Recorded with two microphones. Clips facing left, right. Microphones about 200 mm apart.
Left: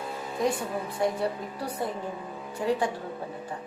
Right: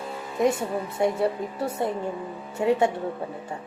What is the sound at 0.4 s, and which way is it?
A woman's voice, 25° right (ahead or behind).